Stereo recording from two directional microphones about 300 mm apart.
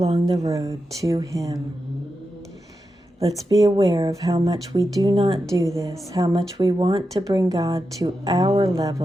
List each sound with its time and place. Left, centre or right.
0.0 s speech: centre
3.2 s speech: centre